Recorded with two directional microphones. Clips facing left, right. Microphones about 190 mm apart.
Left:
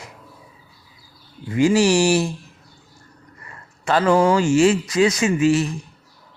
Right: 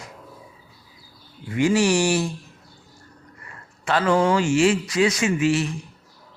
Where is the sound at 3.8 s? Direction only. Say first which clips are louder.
Left 3 dB; 40° left (ahead or behind).